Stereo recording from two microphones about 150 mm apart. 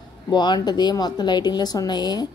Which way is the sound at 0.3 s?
30° left (ahead or behind).